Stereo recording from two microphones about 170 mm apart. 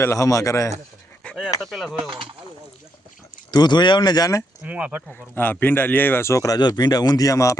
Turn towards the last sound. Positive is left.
turn(degrees=20)  # may be behind; listen again after turning